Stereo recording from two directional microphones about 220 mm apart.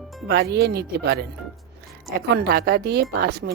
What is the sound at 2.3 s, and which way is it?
Speech, 45° right (ahead or behind).